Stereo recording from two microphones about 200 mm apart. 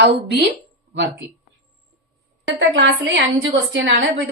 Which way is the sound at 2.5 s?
70° right (ahead or behind).